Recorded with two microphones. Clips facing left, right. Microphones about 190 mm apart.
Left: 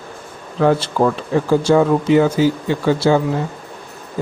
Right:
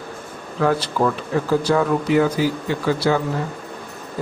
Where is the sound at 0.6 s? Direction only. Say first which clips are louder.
Left 4 dB; 25° left (ahead or behind).